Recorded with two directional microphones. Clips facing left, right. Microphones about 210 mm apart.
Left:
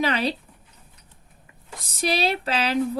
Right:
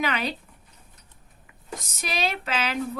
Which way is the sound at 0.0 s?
35° left (ahead or behind).